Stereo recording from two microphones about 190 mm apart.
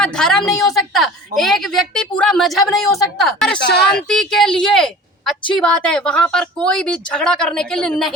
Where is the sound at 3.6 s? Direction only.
60° left (ahead or behind).